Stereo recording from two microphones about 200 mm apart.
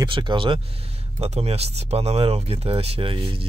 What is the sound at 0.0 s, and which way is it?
Speech, 25° right (ahead or behind).